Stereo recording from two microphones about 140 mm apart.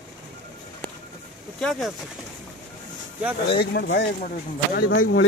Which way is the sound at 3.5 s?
90° left.